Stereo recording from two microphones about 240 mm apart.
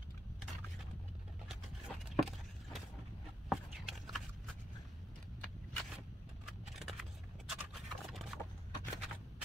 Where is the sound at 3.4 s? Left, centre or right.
Centre.